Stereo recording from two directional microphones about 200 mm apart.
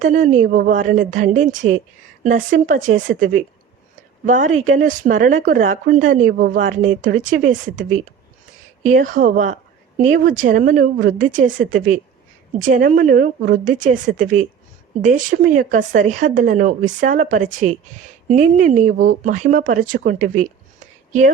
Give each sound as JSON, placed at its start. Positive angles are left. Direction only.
{"t": 0.0, "sound": "speech", "side_deg": -40}